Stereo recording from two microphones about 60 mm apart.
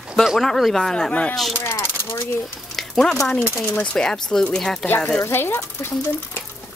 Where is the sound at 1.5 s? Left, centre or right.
Left.